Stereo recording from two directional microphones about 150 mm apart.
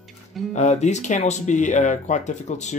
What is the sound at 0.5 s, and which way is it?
Speech, 50° left (ahead or behind).